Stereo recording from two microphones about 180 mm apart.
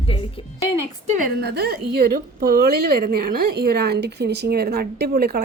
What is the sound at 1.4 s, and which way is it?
A woman's voice, 60° right (ahead or behind).